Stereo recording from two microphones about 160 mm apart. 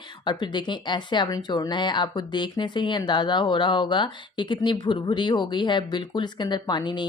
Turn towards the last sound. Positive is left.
turn(degrees=30)  # may be behind; listen again after turning